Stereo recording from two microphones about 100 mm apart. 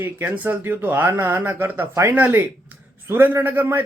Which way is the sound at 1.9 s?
30° right (ahead or behind).